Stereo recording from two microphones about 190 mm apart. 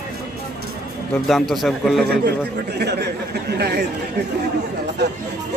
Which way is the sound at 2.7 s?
60° right (ahead or behind).